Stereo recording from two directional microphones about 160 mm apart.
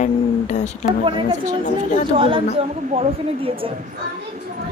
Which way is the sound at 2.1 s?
35° right (ahead or behind).